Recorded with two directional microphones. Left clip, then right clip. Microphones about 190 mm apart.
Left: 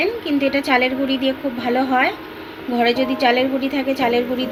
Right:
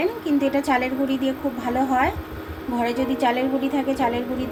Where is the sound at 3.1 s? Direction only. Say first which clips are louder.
Left 5 dB; 35° left (ahead or behind).